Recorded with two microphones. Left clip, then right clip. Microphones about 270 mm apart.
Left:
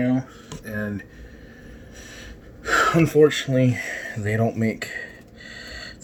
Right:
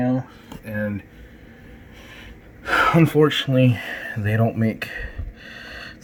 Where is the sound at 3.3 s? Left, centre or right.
Right.